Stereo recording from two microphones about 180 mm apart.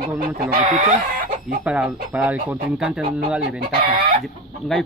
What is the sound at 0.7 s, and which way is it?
Speech, 40° right (ahead or behind).